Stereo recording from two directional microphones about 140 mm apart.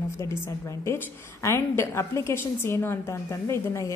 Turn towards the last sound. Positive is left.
turn(degrees=20)  # may be behind; listen again after turning